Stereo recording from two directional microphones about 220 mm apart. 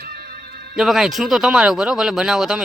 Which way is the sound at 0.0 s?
45° right (ahead or behind).